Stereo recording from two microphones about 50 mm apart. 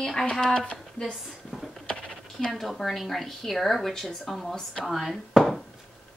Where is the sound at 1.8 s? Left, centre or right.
Left.